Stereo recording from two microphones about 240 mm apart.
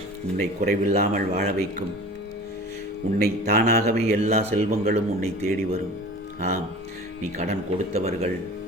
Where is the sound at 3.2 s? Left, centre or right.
Right.